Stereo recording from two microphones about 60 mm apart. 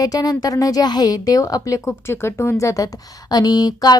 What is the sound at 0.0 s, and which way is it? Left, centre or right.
A woman's voice, left.